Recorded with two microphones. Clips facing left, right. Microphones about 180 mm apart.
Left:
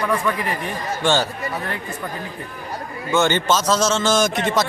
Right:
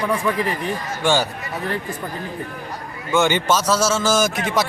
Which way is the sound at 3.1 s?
15° right (ahead or behind).